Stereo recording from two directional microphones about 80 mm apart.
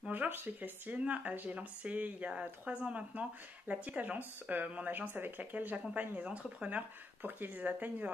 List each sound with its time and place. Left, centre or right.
0.1 s speech: right
7.2 s speech: right